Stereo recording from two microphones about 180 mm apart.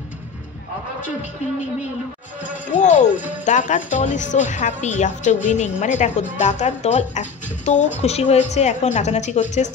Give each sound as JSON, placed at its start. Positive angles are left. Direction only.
{"t": 2.7, "sound": "a woman's voice", "side_deg": 40}